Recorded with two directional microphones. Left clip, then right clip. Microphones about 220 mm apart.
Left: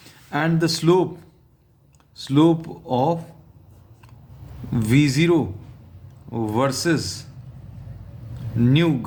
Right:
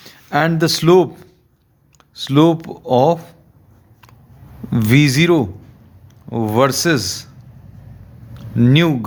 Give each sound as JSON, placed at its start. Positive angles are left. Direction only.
{"t": 0.0, "sound": "a man's voice", "side_deg": -40}
{"t": 4.7, "sound": "a man's voice", "side_deg": -35}
{"t": 8.5, "sound": "a man's voice", "side_deg": -40}